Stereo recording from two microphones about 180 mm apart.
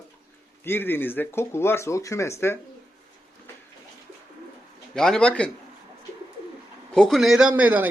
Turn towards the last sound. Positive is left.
turn(degrees=-10)  # may be behind; listen again after turning